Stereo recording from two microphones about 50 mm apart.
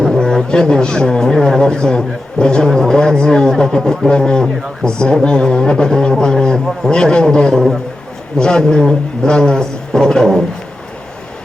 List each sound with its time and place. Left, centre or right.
0.2 s a man's voice: centre